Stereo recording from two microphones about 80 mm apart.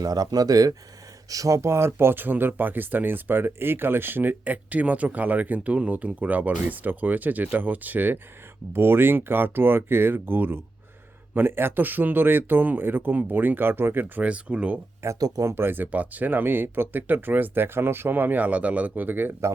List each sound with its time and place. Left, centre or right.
0.0 s speech: right; by 14.8 s centre
15.2 s speech: right
15.5 s speech: right